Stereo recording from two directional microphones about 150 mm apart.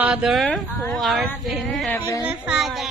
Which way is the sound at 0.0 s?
5° right (ahead or behind).